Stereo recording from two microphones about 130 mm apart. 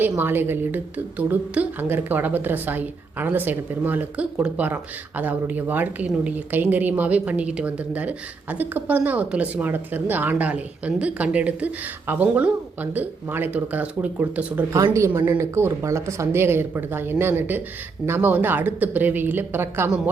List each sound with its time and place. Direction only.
0.2 s a woman's voice: 15° right (ahead or behind)